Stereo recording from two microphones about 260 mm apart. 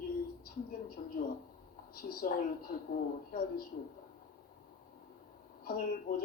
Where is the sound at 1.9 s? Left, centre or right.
Left.